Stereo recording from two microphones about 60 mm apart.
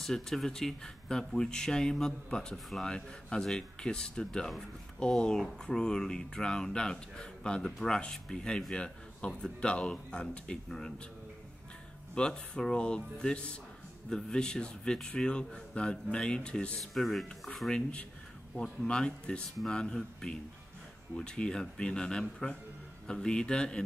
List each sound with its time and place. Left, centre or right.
0.0 s speech: centre
12.2 s speech: centre
16.8 s speech: centre
17.6 s speech: centre